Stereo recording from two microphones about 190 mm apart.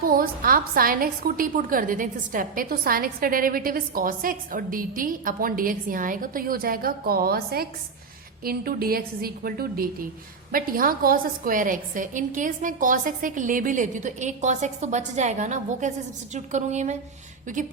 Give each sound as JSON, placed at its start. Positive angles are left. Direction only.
{"t": 0.0, "sound": "a woman's voice", "side_deg": -50}